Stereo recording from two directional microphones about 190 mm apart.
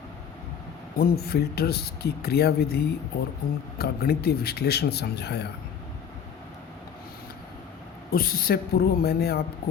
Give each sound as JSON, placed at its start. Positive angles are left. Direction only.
{"t": 0.9, "sound": "speech", "side_deg": 55}
{"t": 8.1, "sound": "speech", "side_deg": 50}